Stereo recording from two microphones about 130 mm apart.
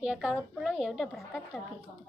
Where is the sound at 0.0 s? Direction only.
5° right (ahead or behind).